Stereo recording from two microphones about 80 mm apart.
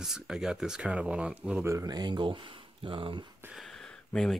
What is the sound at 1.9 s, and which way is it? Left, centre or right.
Speech, right.